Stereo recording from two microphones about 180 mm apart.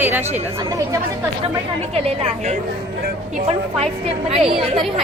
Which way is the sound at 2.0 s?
35° right (ahead or behind).